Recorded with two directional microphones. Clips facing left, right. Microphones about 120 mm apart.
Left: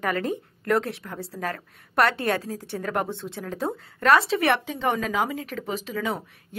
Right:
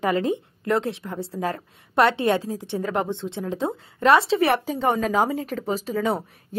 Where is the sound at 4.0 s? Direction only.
25° right (ahead or behind).